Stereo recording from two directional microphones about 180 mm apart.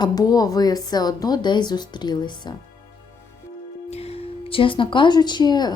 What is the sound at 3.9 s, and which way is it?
Speech, 35° left (ahead or behind).